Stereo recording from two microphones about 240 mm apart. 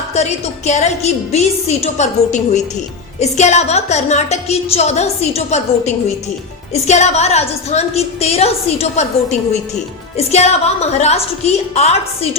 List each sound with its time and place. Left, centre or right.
0.1 s a woman's voice: left